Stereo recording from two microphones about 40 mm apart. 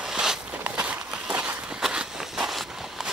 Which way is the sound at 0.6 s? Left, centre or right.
Right.